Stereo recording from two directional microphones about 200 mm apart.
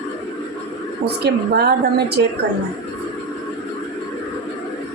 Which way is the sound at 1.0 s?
55° right (ahead or behind).